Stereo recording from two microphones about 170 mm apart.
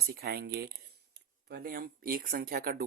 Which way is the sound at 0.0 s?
65° right (ahead or behind).